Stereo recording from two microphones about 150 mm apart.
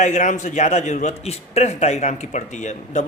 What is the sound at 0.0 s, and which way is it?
A man's voice, 55° left (ahead or behind).